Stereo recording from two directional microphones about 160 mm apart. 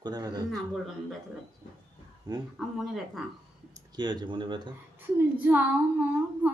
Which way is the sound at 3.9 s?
30° right (ahead or behind).